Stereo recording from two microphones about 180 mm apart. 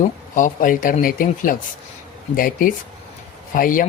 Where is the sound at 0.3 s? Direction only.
50° left (ahead or behind).